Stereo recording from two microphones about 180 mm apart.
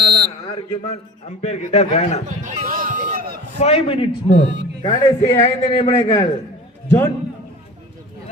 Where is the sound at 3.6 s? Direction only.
35° left (ahead or behind).